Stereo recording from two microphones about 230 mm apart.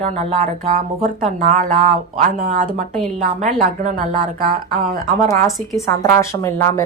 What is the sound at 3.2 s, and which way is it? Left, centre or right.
Speech, right.